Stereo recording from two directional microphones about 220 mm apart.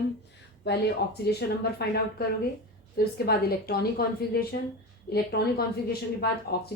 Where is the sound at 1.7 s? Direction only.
45° left (ahead or behind).